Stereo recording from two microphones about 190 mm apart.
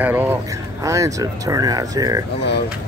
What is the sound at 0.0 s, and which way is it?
Speech, 10° right (ahead or behind).